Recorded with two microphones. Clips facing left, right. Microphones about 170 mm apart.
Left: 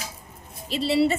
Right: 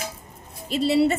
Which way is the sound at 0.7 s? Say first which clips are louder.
Right 2 dB; 50° right (ahead or behind).